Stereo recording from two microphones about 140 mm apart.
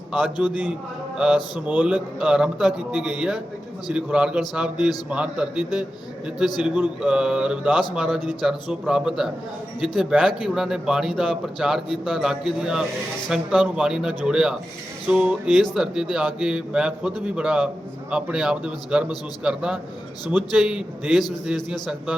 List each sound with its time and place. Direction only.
0.4 s speech: 5° right (ahead or behind)
1.6 s a man's voice: 10° right (ahead or behind)